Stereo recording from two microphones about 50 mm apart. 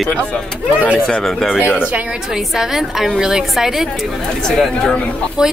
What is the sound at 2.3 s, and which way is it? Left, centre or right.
Speech, centre.